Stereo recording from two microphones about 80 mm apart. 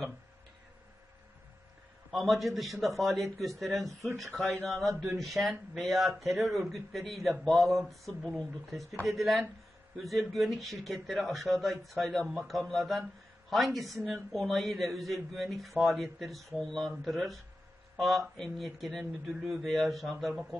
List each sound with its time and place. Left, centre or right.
2.1 s speech: centre
14.0 s speech: centre